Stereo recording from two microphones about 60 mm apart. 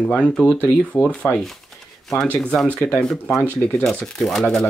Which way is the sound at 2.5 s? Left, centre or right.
Centre.